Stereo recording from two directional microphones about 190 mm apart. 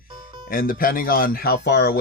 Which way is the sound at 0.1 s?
25° right (ahead or behind).